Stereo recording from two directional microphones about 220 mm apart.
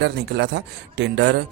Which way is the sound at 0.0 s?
50° right (ahead or behind).